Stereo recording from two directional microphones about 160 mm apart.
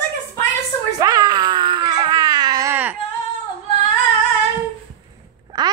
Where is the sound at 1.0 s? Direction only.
25° right (ahead or behind).